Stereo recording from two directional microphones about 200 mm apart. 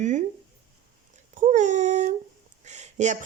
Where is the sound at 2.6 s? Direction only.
35° right (ahead or behind).